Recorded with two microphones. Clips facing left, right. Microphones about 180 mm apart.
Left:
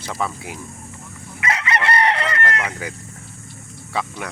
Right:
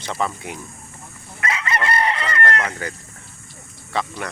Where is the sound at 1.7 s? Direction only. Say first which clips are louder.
Left 2 dB; 75° left (ahead or behind).